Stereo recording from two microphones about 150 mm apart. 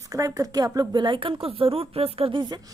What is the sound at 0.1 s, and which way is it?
A woman's voice, 20° right (ahead or behind).